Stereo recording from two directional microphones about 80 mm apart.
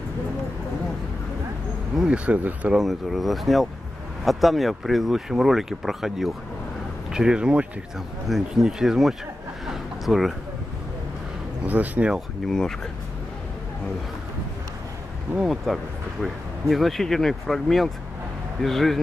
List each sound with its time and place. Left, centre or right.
2.0 s speech: centre
2.7 s speech: centre
9.7 s a sound: centre
11.6 s speech: centre
12.4 s speech: centre
15.4 s speech: centre